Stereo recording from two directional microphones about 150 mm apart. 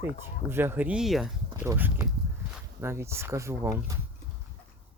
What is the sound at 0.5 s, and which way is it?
Speech, 15° right (ahead or behind).